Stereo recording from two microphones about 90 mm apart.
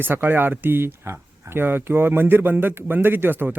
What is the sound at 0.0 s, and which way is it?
Speech, 20° right (ahead or behind).